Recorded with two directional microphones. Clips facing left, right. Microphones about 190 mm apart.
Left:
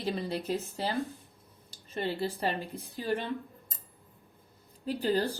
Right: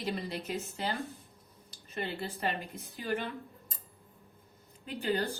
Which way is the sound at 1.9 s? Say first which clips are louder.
Left 5 dB; 30° left (ahead or behind).